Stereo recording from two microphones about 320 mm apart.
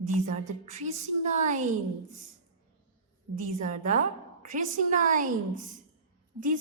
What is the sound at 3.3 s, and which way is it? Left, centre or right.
A woman's voice, right.